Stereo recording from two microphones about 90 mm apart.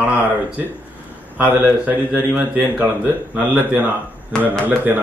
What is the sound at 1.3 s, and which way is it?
A man's voice, 20° right (ahead or behind).